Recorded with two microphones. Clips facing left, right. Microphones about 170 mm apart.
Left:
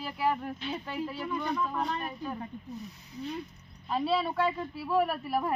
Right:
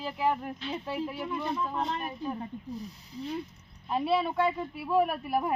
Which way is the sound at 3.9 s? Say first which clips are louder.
Right 1 dB; 10° right (ahead or behind).